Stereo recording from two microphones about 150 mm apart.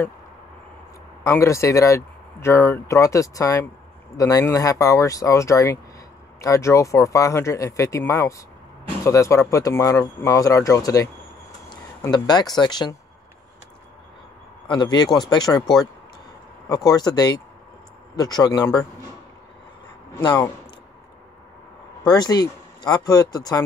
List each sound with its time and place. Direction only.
1.2 s speech: 20° left (ahead or behind)
12.1 s speech: 25° left (ahead or behind)
14.7 s speech: 30° left (ahead or behind)
20.2 s speech: 30° left (ahead or behind)
22.0 s speech: 25° left (ahead or behind)